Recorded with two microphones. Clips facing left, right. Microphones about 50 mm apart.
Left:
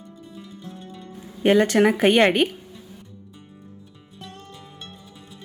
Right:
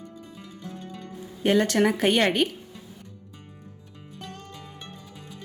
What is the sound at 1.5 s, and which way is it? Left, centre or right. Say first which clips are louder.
Speech: left 3 dB; centre.